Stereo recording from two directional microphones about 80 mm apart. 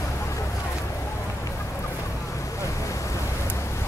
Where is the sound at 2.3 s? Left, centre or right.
Left.